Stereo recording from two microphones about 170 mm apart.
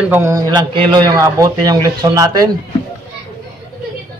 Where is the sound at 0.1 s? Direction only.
20° right (ahead or behind).